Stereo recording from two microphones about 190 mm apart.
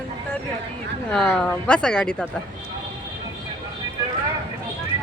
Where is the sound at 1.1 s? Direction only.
5° left (ahead or behind).